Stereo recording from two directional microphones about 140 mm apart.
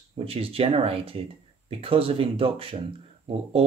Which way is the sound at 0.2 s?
45° right (ahead or behind).